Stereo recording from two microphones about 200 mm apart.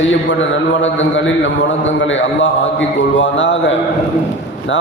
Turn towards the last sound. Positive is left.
turn(degrees=65)  # may be behind; listen again after turning